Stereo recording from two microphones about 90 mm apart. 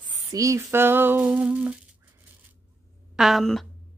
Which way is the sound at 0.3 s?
35° right (ahead or behind).